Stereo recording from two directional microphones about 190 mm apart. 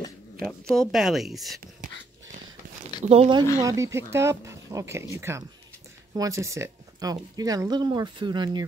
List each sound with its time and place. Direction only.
0.4 s speech: 5° left (ahead or behind)
3.1 s speech: 30° right (ahead or behind)
3.6 s speech: 15° right (ahead or behind)